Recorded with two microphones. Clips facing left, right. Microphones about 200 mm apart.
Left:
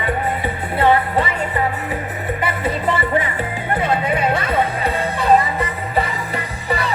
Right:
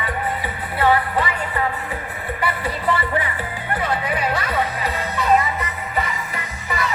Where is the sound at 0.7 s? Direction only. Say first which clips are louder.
Left 3 dB; 25° left (ahead or behind).